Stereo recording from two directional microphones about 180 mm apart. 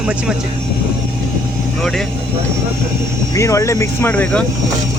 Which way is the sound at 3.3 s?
15° left (ahead or behind).